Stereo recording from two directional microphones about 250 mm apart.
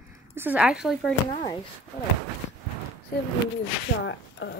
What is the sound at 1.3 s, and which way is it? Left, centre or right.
Speech, centre.